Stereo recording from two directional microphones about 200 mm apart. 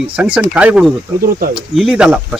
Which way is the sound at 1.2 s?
45° right (ahead or behind).